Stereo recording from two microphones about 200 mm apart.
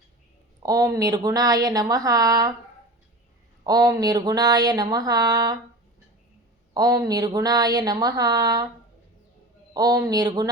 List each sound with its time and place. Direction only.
0.6 s speech: 15° right (ahead or behind)
3.6 s speech: 20° right (ahead or behind)
6.7 s speech: 20° right (ahead or behind)
9.7 s speech: 20° right (ahead or behind)